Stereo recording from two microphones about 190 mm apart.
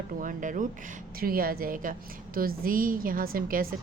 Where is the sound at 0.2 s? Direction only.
45° right (ahead or behind).